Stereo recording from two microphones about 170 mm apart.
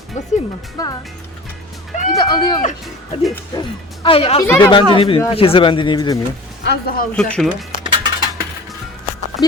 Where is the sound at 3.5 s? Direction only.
20° left (ahead or behind).